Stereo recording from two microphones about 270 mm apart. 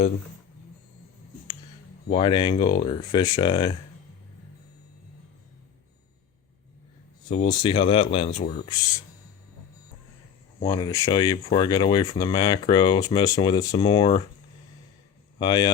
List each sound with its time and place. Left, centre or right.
2.0 s speech: centre
7.6 s speech: centre
10.6 s speech: centre
15.4 s speech: centre